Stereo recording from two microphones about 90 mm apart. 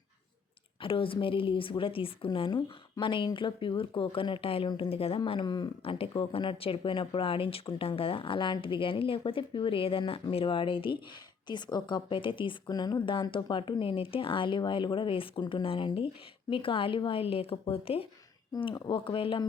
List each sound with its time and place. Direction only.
0.8 s a woman's voice: 80° left; by 5.7 s 55° left (ahead or behind)
5.8 s a woman's voice: 85° left
11.4 s speech: 55° left (ahead or behind)
12.7 s speech: 50° left (ahead or behind); by 18.1 s 90° left
18.7 s speech: 70° left (ahead or behind)